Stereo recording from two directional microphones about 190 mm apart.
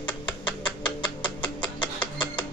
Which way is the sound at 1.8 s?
5° left (ahead or behind).